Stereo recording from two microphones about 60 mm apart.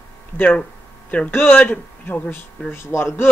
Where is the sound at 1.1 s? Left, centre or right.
Left.